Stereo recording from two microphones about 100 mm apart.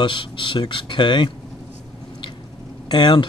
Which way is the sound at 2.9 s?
50° left (ahead or behind).